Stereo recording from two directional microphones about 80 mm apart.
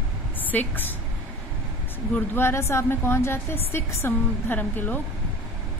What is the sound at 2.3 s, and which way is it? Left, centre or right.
A woman's voice, left.